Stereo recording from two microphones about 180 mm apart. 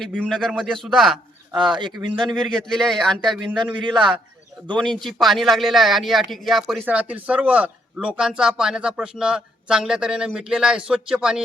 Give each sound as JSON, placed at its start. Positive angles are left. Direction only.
{"t": 0.0, "sound": "speech", "side_deg": 0}
{"t": 1.5, "sound": "speech", "side_deg": -25}
{"t": 2.4, "sound": "speech", "side_deg": 5}
{"t": 3.8, "sound": "speech", "side_deg": -25}
{"t": 4.7, "sound": "speech", "side_deg": 0}